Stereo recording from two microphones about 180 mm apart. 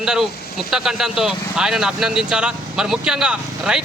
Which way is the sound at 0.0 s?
5° right (ahead or behind).